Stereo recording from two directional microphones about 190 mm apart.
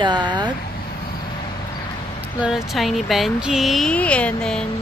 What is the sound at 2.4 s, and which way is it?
Speech, centre (ahead or behind).